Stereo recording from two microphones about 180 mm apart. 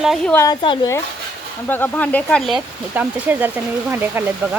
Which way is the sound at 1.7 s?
10° left (ahead or behind).